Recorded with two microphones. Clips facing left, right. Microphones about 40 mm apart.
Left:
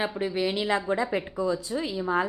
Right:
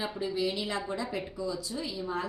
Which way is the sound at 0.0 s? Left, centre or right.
Left.